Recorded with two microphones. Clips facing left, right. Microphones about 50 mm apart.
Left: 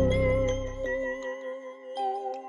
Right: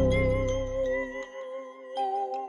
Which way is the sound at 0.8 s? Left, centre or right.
Left.